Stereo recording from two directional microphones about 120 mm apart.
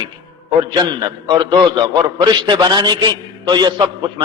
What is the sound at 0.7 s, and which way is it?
A man's voice, 35° right (ahead or behind).